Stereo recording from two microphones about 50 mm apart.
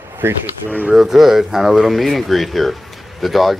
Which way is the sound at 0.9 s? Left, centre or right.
Centre.